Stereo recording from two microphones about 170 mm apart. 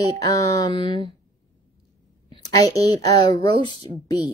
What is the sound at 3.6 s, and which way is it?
Speech, 30° right (ahead or behind).